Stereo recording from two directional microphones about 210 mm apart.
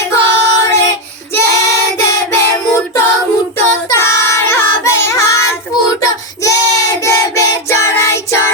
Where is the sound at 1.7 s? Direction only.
15° left (ahead or behind).